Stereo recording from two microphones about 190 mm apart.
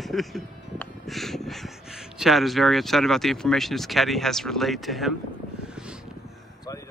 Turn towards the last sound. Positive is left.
turn(degrees=0)  # may be behind; listen again after turning